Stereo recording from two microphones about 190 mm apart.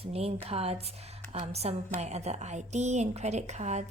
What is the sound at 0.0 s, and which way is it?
A woman's voice, 35° right (ahead or behind).